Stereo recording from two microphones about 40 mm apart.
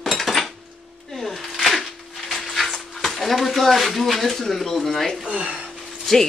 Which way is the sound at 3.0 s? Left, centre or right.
Centre.